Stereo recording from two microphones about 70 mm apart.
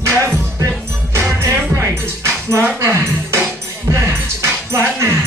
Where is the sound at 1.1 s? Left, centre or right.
Right.